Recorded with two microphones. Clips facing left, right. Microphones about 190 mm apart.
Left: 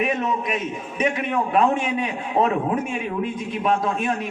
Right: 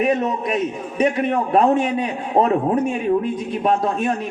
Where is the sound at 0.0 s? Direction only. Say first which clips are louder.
Right 4 dB; 40° right (ahead or behind).